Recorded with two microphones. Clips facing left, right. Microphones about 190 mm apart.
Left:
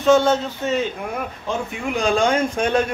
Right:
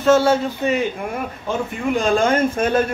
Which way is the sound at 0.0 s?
5° right (ahead or behind).